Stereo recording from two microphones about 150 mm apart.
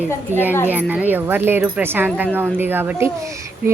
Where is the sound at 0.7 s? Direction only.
10° right (ahead or behind).